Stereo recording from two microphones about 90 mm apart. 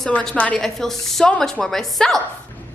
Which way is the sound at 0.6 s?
5° left (ahead or behind).